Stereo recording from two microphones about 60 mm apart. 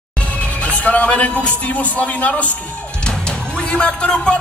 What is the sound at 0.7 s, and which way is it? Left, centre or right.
Speech, left.